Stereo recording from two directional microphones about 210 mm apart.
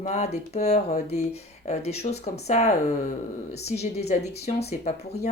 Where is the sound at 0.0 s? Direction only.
30° left (ahead or behind).